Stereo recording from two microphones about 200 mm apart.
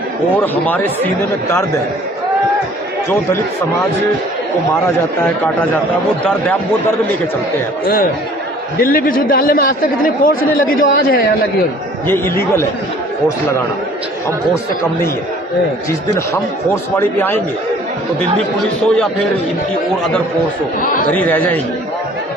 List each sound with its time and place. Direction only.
0.4 s speech: 10° left (ahead or behind)
6.2 s speech: 10° left (ahead or behind)
8.8 s speech: 45° left (ahead or behind)
12.0 s speech: 10° left (ahead or behind)
15.9 s speech: 15° left (ahead or behind)
21.1 s speech: 10° left (ahead or behind)